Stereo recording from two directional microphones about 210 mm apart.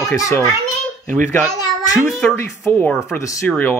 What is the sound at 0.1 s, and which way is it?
A child's voice, 15° left (ahead or behind).